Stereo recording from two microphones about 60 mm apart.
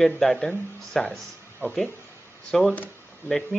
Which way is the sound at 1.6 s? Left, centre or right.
Left.